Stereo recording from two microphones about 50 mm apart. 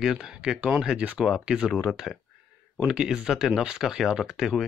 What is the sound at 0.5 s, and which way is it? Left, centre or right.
Speech, right.